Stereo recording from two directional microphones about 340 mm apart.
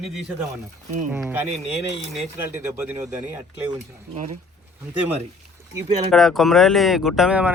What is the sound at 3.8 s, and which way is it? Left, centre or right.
Speech, centre.